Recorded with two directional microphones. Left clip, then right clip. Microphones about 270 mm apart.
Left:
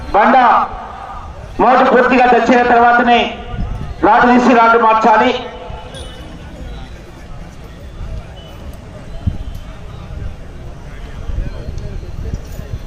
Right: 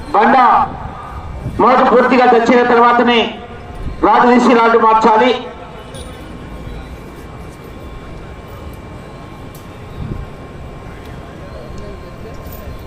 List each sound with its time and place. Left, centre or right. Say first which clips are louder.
0.1 s a man's voice: even; centre
1.5 s a man's voice: even; centre